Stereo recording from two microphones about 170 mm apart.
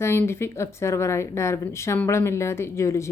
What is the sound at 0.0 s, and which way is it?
Speech, 15° left (ahead or behind).